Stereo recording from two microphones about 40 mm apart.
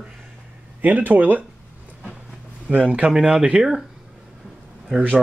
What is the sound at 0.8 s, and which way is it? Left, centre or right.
Speech, right.